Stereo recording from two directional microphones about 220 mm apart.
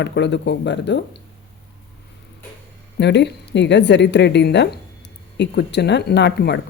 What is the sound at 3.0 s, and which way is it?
Speech, 50° left (ahead or behind).